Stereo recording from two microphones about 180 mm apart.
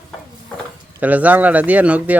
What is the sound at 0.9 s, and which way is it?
Speech, 10° right (ahead or behind).